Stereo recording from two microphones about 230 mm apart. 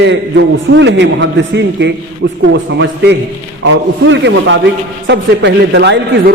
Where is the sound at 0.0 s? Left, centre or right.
Right.